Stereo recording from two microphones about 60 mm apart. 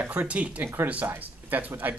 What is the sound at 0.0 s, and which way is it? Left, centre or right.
Speech, right.